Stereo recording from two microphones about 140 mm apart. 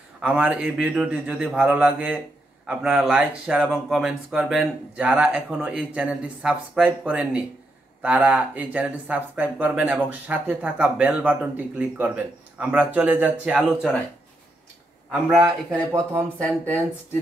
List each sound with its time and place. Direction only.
0.2 s speech: 10° right (ahead or behind)
15.0 s a man's voice: centre (ahead or behind)
15.9 s speech: 20° right (ahead or behind)
16.3 s speech: 10° left (ahead or behind)